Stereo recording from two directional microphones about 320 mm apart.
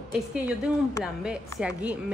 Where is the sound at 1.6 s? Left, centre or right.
Centre.